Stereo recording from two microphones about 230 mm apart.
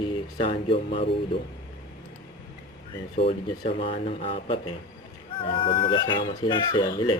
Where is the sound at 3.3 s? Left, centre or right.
Left.